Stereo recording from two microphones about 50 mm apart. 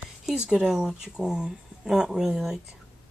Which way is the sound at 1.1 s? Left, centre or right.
Centre.